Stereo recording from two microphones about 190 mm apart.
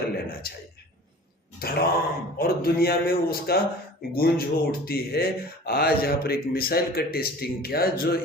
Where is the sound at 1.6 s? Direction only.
50° left (ahead or behind).